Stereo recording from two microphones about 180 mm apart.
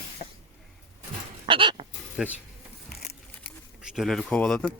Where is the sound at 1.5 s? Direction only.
30° right (ahead or behind).